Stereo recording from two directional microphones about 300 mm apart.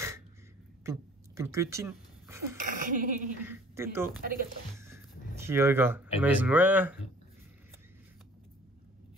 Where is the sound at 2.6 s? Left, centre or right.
Right.